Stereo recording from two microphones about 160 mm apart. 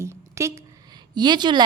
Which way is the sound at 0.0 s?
15° right (ahead or behind).